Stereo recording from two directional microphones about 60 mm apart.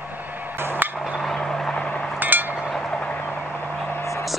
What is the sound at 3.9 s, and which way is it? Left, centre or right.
Vehicle, left.